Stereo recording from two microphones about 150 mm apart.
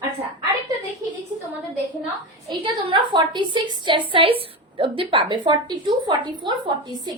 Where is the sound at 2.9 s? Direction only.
35° right (ahead or behind).